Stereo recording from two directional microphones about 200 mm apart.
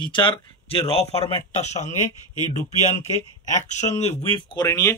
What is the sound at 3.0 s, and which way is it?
Speech, 35° left (ahead or behind).